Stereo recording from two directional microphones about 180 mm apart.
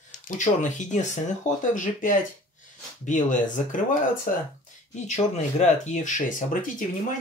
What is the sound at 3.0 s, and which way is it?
Speech, 45° left (ahead or behind).